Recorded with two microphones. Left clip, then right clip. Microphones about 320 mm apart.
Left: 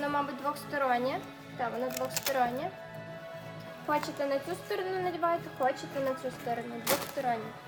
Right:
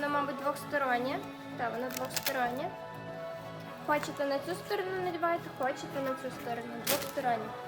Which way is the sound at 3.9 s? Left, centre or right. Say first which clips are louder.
Left 1 dB; centre.